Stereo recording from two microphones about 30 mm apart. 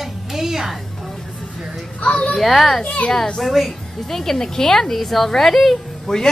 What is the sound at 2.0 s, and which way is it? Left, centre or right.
Speech, left.